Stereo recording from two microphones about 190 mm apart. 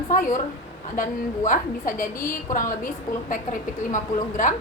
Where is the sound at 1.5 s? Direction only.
45° left (ahead or behind).